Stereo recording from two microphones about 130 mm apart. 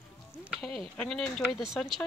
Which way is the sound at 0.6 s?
Centre (ahead or behind).